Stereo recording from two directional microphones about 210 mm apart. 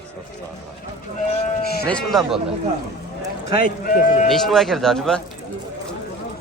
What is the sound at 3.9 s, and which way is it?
Speech, 40° left (ahead or behind).